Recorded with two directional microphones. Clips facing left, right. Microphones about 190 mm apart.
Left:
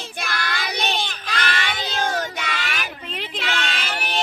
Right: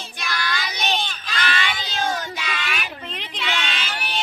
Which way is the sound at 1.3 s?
55° left (ahead or behind).